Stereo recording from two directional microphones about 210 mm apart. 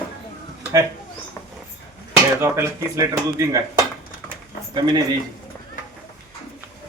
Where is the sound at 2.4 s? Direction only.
15° right (ahead or behind).